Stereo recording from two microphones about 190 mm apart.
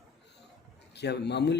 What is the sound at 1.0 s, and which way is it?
Speech, 65° left (ahead or behind).